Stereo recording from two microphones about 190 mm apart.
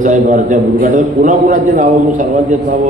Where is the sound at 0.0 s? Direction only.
40° right (ahead or behind).